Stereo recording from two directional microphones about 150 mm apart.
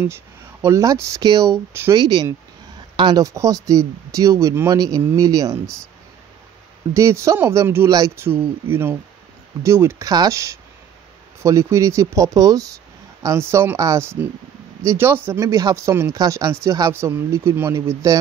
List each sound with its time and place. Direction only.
0.0 s speech: 15° right (ahead or behind)
2.0 s speech: 30° right (ahead or behind)
6.9 s speech: 20° right (ahead or behind)